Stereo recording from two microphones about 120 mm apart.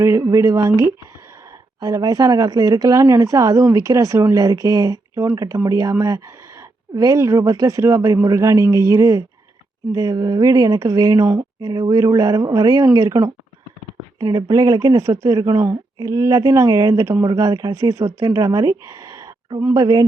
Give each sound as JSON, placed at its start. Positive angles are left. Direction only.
{"t": 0.0, "sound": "speech", "side_deg": -25}
{"t": 14.2, "sound": "speech", "side_deg": -35}